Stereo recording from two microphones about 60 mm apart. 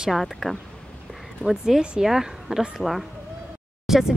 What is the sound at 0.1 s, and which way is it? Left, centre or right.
Speech, centre.